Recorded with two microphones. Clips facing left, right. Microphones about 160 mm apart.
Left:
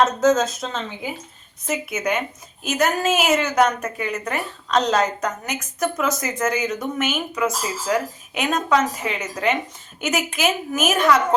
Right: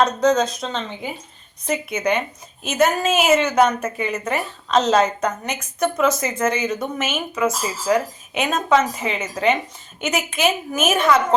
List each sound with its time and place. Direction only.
0.0 s a woman's voice: centre (ahead or behind)